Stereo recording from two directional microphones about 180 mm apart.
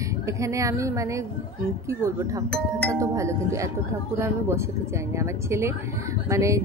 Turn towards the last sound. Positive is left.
turn(degrees=-15)  # may be behind; listen again after turning